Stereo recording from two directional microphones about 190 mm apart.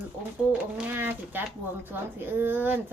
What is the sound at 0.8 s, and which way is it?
Speech, 10° right (ahead or behind).